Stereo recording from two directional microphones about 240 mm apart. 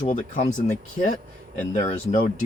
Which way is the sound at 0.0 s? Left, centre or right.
Left.